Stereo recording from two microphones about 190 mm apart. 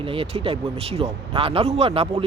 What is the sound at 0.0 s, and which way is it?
Speech, 30° right (ahead or behind).